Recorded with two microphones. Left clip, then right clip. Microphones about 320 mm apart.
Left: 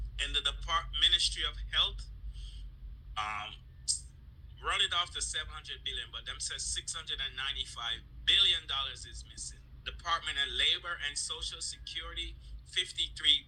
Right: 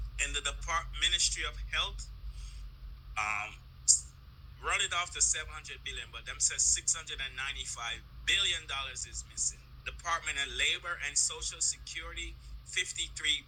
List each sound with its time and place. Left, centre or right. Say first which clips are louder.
0.2 s a sound: left 2 dB; centre
3.2 s a man's voice: right 3 dB; centre
4.6 s a man's voice: left 1 dB; centre